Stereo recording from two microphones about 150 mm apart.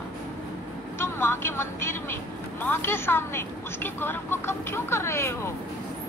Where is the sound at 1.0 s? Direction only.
15° left (ahead or behind).